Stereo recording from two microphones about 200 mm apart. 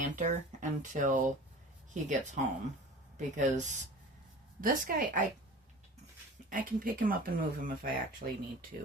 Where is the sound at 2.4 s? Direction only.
40° right (ahead or behind).